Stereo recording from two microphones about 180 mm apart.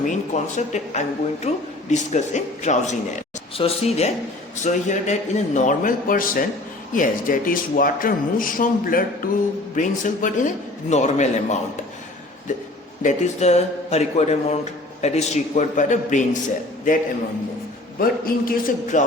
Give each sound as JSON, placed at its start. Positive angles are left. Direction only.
{"t": 0.0, "sound": "a man's voice", "side_deg": 45}
{"t": 13.0, "sound": "a man's voice", "side_deg": 40}